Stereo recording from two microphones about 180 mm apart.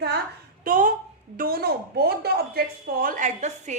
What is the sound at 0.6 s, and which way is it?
A woman's voice, 50° right (ahead or behind).